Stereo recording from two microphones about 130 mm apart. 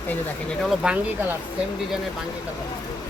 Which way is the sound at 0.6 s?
Centre (ahead or behind).